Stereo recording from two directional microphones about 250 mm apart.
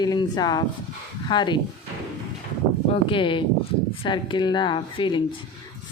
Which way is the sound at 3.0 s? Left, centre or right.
Centre.